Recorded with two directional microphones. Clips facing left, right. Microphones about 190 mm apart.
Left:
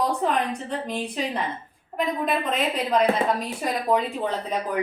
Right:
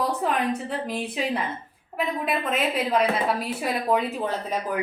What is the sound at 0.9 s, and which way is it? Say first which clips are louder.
A woman's voice: right 1 dB; 5° right (ahead or behind).